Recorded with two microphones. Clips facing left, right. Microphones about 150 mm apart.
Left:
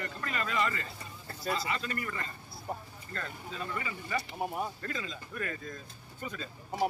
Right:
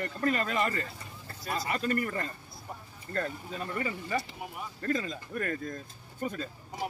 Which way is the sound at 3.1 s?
45° right (ahead or behind).